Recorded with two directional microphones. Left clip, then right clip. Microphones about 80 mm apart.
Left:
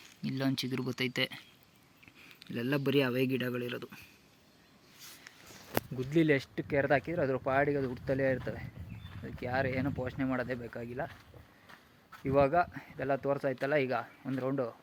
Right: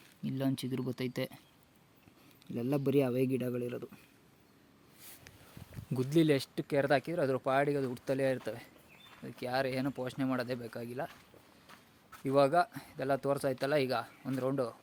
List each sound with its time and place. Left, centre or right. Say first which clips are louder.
0.2 s speech: left 2 dB; centre
6.3 s speech: left 1 dB; right
12.2 s speech: even; right